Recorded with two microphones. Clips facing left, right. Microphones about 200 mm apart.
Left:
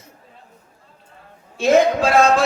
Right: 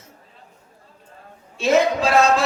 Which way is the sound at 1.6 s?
55° left (ahead or behind).